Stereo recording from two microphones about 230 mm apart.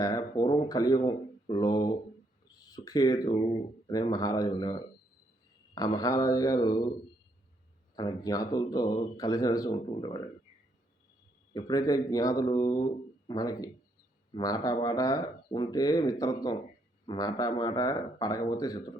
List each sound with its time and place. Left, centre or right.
0.0 s speech: centre
7.9 s speech: centre
11.5 s speech: centre